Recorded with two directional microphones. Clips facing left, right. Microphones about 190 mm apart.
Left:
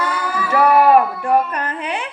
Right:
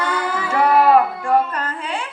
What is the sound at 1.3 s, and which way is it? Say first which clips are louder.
Speech: left 1 dB; 20° left (ahead or behind).